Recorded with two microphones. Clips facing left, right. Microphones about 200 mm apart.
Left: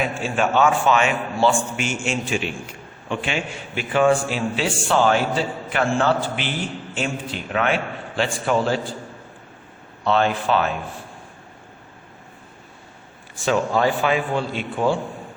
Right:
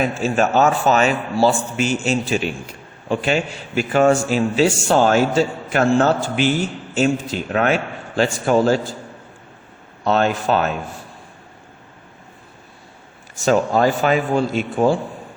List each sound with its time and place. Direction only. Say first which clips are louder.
0.0 s a man's voice: right 4 dB; 40° right (ahead or behind)
10.0 s a man's voice: right 2 dB; 45° right (ahead or behind)
13.3 s a man's voice: right 4 dB; 40° right (ahead or behind)